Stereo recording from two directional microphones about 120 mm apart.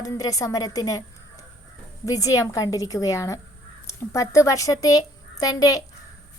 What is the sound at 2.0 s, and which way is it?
A woman's voice, 30° left (ahead or behind).